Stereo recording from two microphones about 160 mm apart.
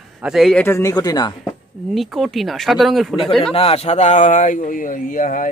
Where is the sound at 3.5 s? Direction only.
35° left (ahead or behind).